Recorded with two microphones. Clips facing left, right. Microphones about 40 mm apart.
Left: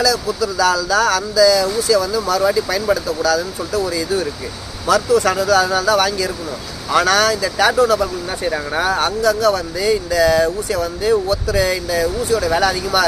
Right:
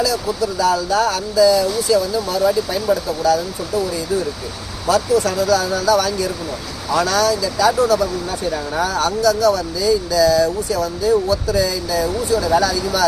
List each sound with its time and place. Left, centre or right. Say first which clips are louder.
0.6 s speech: left 1 dB; left
4.9 s speech: left 2 dB; left